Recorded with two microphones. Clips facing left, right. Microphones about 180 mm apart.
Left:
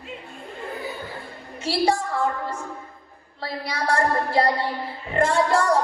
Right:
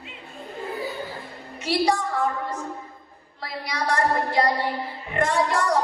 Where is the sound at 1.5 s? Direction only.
30° left (ahead or behind).